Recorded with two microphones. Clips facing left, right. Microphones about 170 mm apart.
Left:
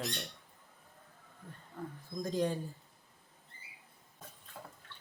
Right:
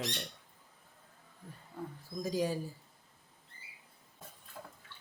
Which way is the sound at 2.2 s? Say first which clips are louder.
Even; 5° right (ahead or behind).